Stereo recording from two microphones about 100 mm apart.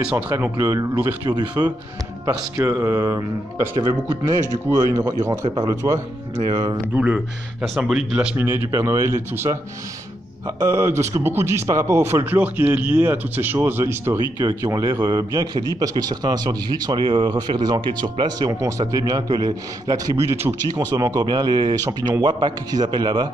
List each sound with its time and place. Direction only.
0.4 s speech: 30° right (ahead or behind)
1.3 s a man's voice: 45° right (ahead or behind)
2.2 s a man's voice: 30° right (ahead or behind); by 6.8 s 45° right (ahead or behind)
6.9 s speech: 10° right (ahead or behind)
8.5 s speech: 30° right (ahead or behind)
14.4 s a man's voice: 35° right (ahead or behind)
18.6 s a man's voice: 35° right (ahead or behind)
20.2 s a man's voice: 25° right (ahead or behind)
21.3 s a man's voice: 45° right (ahead or behind)